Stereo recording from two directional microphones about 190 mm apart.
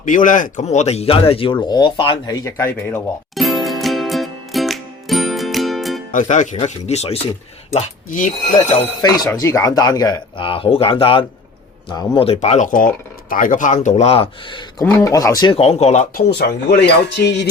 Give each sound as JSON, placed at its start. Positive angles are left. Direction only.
{"t": 0.0, "sound": "speech", "side_deg": 45}
{"t": 2.4, "sound": "a man's voice", "side_deg": 15}
{"t": 3.3, "sound": "music", "side_deg": 0}
{"t": 6.1, "sound": "speech", "side_deg": 40}
{"t": 9.0, "sound": "speech", "side_deg": 20}
{"t": 14.8, "sound": "speech", "side_deg": 15}
{"t": 16.4, "sound": "speech", "side_deg": 60}